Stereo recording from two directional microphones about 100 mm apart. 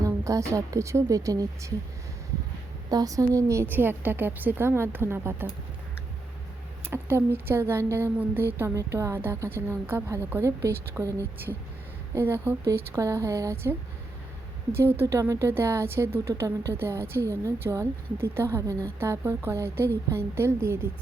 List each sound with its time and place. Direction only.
0.0 s a woman's voice: 30° right (ahead or behind)
2.9 s a woman's voice: 35° right (ahead or behind)
6.9 s a woman's voice: 25° right (ahead or behind)